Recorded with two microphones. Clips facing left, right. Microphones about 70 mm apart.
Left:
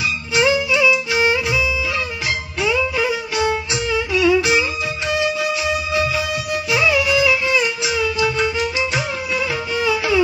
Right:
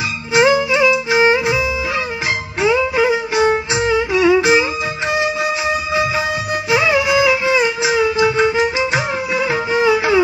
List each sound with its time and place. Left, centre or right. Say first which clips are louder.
0.3 s music: right 4 dB; right